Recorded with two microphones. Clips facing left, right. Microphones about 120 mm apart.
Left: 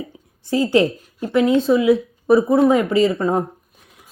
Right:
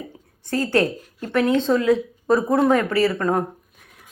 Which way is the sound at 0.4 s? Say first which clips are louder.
Left 4 dB; 15° left (ahead or behind).